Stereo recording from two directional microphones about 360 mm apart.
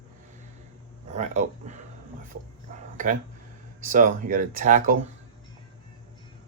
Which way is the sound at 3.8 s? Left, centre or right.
Right.